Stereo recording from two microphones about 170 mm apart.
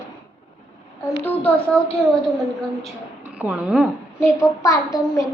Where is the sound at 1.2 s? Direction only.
10° left (ahead or behind).